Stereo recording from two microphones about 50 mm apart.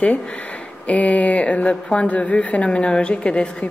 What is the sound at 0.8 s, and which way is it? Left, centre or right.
Speech, left.